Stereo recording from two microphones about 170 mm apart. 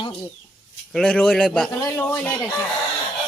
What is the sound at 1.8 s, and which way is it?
Speech, 20° left (ahead or behind).